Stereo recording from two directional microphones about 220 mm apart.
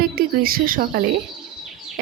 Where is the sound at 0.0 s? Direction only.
40° right (ahead or behind).